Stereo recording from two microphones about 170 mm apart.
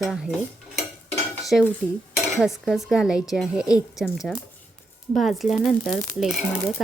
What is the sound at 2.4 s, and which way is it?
Speech, 5° right (ahead or behind).